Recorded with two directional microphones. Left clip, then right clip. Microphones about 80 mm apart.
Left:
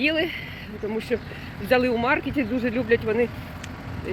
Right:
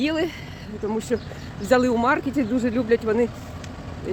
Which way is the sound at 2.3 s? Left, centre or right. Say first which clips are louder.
Right 2 dB; right.